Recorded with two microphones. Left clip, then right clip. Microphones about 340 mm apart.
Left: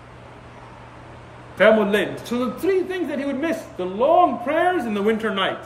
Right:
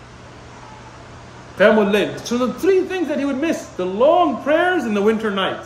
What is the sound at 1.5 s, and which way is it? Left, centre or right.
A man's voice, centre.